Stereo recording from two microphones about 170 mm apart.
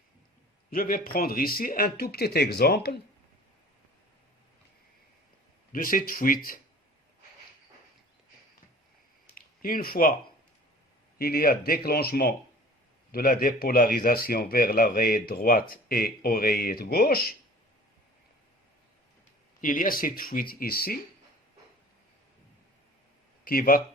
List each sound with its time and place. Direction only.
0.7 s a man's voice: 55° left (ahead or behind)
5.7 s a man's voice: 55° left (ahead or behind)
9.3 s speech: 55° left (ahead or behind)
11.2 s a man's voice: 60° left (ahead or behind)
19.6 s a man's voice: 55° left (ahead or behind)
23.4 s speech: 55° left (ahead or behind)